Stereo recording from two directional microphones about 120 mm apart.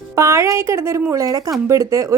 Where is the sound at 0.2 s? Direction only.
25° right (ahead or behind).